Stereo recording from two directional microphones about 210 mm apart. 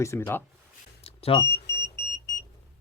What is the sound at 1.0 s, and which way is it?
Smoke detector, 30° left (ahead or behind).